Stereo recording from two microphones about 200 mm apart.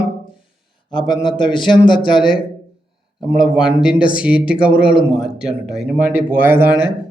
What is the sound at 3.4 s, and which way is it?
A man's voice, 5° right (ahead or behind).